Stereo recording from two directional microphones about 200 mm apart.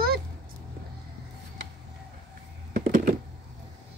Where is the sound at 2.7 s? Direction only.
45° right (ahead or behind).